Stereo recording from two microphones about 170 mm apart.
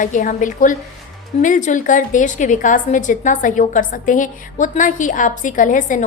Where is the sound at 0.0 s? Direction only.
50° left (ahead or behind).